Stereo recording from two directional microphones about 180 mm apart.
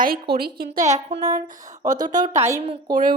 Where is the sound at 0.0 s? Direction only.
55° right (ahead or behind).